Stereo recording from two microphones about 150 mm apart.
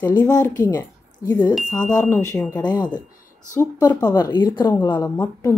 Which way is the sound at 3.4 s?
55° left (ahead or behind).